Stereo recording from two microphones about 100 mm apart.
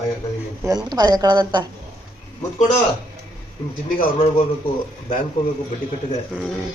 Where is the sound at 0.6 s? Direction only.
40° right (ahead or behind).